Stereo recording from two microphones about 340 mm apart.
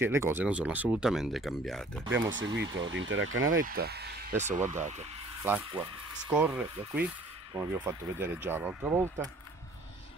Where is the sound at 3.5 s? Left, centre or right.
Right.